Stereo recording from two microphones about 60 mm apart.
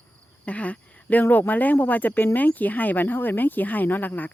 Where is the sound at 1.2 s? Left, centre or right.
Left.